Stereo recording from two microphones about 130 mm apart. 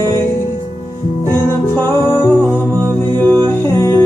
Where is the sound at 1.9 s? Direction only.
20° left (ahead or behind).